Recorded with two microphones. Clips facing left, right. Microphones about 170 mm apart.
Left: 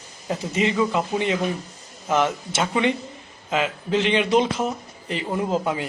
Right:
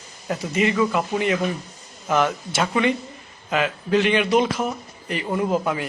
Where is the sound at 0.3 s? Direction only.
25° left (ahead or behind).